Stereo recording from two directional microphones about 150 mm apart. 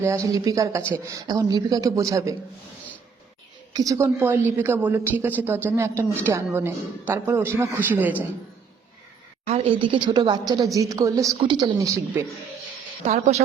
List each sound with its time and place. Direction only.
0.0 s a woman's voice: 20° right (ahead or behind)
3.7 s a woman's voice: 25° right (ahead or behind)
9.5 s a woman's voice: 40° right (ahead or behind); by 12.2 s 20° right (ahead or behind)
13.1 s speech: 50° right (ahead or behind)